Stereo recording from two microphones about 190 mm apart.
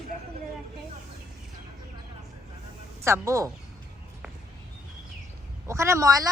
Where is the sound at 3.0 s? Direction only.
15° right (ahead or behind).